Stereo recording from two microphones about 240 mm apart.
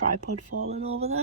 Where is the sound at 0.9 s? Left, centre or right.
Right.